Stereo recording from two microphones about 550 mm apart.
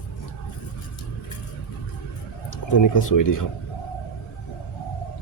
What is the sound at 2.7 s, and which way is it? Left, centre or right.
Speech, left.